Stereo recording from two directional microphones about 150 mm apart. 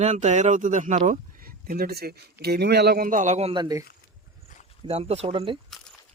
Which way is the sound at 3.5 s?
25° right (ahead or behind).